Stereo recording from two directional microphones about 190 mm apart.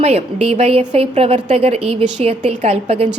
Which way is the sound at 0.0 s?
30° right (ahead or behind).